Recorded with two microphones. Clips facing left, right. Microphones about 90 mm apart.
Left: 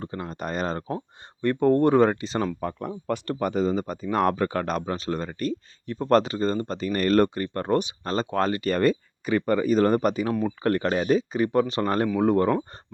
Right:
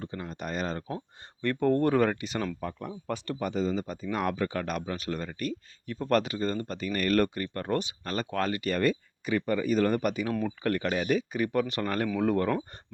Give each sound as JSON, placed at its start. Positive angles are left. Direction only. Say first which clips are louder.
{"t": 0.0, "sound": "speech", "louder": "left 4 dB", "side_deg": 40}
{"t": 0.9, "sound": "speech", "louder": "left 5 dB", "side_deg": 20}
{"t": 2.6, "sound": "speech", "louder": "left 5 dB", "side_deg": 45}